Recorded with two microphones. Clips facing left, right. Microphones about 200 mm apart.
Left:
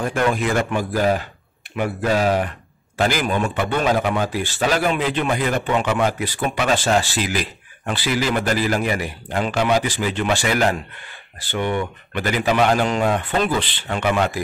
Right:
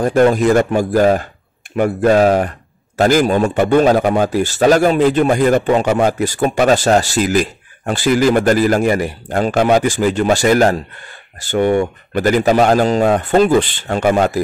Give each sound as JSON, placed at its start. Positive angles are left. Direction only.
{"t": 0.0, "sound": "a man's voice", "side_deg": -40}